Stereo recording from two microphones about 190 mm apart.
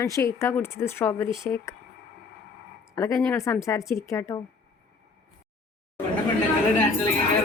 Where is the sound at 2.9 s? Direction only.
15° left (ahead or behind).